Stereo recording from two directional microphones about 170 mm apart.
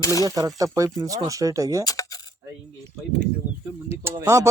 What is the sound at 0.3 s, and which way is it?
Speech, 20° right (ahead or behind).